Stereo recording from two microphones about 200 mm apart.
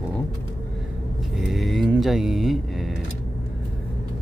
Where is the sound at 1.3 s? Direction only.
Centre (ahead or behind).